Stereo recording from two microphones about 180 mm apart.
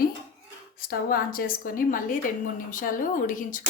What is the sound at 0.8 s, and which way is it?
A woman's voice, 55° left (ahead or behind).